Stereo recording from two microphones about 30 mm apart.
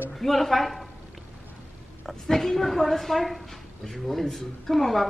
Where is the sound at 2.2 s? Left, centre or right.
Centre.